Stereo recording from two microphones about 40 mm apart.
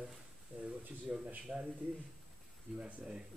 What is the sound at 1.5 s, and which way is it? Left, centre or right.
Speech, centre.